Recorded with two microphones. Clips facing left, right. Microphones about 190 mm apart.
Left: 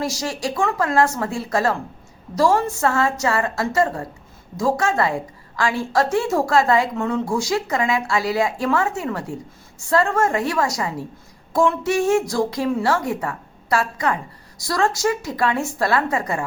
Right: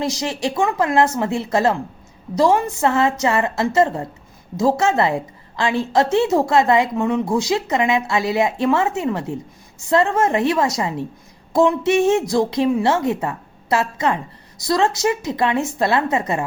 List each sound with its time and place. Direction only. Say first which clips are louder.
0.0 s a woman's voice: right 2 dB; 20° right (ahead or behind)